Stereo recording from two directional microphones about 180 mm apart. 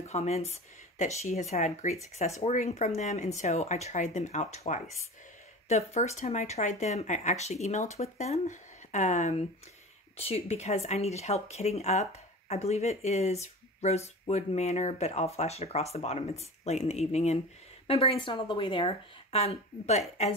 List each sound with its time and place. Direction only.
0.0 s speech: 35° left (ahead or behind)